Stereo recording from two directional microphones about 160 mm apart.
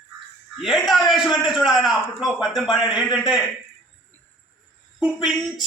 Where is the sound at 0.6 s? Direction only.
Centre (ahead or behind).